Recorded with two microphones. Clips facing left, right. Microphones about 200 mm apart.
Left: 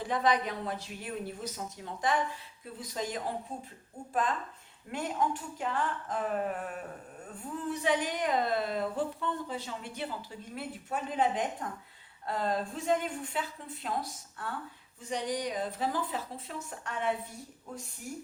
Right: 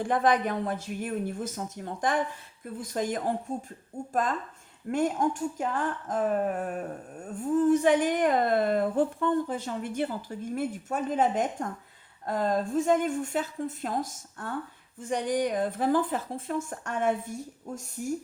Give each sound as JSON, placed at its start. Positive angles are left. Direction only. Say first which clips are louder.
{"t": 0.0, "sound": "speech", "louder": "right 4 dB", "side_deg": -50}